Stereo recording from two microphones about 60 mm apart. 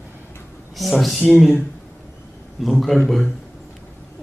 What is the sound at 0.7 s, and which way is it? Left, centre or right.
Speech, centre.